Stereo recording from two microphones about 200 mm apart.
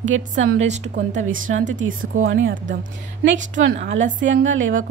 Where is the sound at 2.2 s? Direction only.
75° right (ahead or behind).